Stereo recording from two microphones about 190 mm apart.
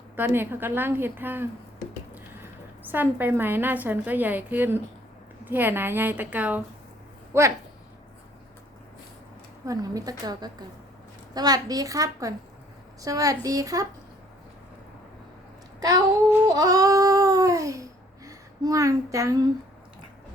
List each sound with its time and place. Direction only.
0.2 s a woman's voice: 10° right (ahead or behind)
9.6 s a woman's voice: 20° right (ahead or behind)
15.8 s child singing: 20° right (ahead or behind)
16.6 s babbling: 20° right (ahead or behind)
18.3 s speech: 20° right (ahead or behind)